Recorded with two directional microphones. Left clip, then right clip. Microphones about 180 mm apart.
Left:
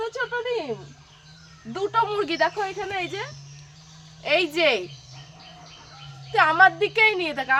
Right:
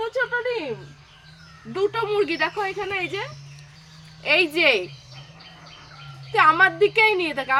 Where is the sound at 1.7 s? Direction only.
10° left (ahead or behind).